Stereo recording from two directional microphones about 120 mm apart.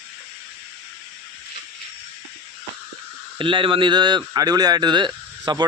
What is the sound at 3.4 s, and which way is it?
Speech, 45° right (ahead or behind).